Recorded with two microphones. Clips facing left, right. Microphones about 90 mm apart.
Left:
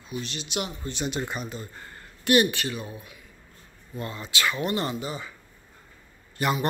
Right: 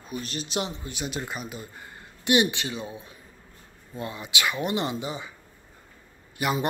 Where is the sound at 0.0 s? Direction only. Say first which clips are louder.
Right 1 dB; 45° right (ahead or behind).